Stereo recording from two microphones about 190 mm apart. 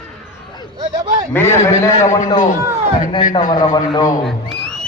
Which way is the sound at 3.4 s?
20° left (ahead or behind).